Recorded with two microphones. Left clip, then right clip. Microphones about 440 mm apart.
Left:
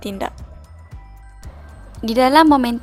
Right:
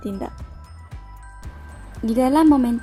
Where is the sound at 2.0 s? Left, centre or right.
Left.